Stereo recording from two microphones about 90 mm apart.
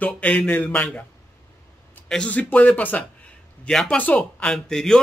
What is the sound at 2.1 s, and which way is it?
Speech, 15° left (ahead or behind).